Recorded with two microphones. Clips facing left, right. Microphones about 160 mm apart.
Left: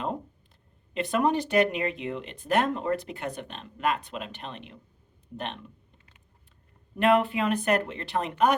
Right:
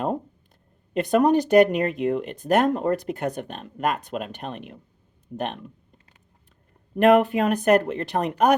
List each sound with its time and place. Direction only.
0.9 s speech: 45° right (ahead or behind)
6.9 s speech: 45° right (ahead or behind)